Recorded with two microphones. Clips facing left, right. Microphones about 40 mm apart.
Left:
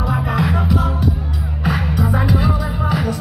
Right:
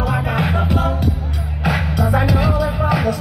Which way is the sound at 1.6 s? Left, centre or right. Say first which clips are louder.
Right 1 dB; right.